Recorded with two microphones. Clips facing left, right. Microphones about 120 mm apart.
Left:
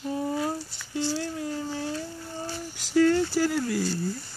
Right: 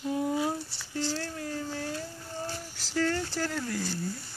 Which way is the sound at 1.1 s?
15° left (ahead or behind).